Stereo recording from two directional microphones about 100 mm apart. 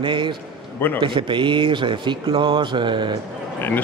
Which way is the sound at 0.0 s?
55° right (ahead or behind).